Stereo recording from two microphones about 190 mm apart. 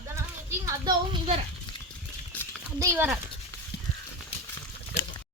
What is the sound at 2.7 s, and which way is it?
Speech, 15° right (ahead or behind).